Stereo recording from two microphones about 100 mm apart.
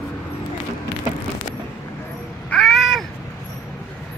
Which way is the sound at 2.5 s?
Centre (ahead or behind).